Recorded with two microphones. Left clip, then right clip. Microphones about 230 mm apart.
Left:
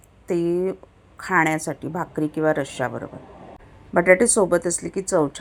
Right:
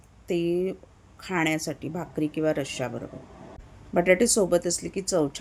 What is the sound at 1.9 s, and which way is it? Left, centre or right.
A woman's voice, centre.